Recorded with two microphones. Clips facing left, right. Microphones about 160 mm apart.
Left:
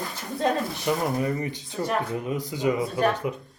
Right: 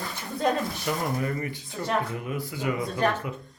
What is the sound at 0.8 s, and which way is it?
Speech, 20° left (ahead or behind).